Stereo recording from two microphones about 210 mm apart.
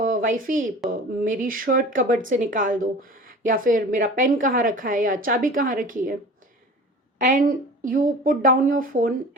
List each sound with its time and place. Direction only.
0.0 s a woman's voice: 40° right (ahead or behind)
7.2 s a woman's voice: 40° right (ahead or behind)